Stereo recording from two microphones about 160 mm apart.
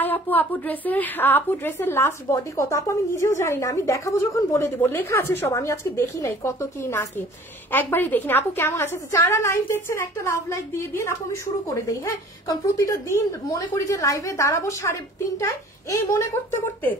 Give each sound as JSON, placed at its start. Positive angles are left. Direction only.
{"t": 0.0, "sound": "a woman's voice", "side_deg": 10}